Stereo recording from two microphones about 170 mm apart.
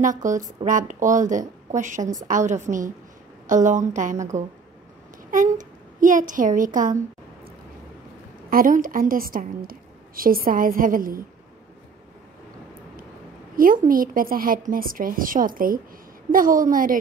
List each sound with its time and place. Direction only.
0.0 s a woman's voice: 50° right (ahead or behind)
5.3 s a woman's voice: 50° right (ahead or behind)
8.5 s a woman's voice: 55° right (ahead or behind)
13.6 s a woman's voice: 55° right (ahead or behind)